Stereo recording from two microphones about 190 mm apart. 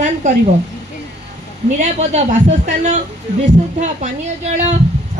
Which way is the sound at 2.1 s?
40° right (ahead or behind).